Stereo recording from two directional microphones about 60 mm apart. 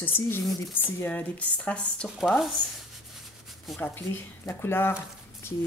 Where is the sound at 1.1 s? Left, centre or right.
Left.